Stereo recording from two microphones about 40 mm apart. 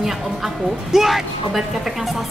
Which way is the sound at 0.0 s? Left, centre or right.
Centre.